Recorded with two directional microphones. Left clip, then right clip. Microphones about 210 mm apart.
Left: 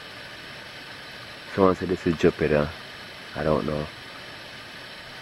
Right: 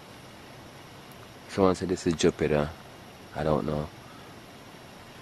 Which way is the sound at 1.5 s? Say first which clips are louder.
Left 3 dB; 5° left (ahead or behind).